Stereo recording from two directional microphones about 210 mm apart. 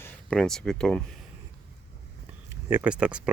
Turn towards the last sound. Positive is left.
turn(degrees=-5)  # may be behind; listen again after turning